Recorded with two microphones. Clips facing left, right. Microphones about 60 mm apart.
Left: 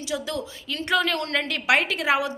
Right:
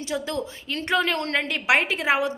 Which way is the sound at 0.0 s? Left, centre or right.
Right.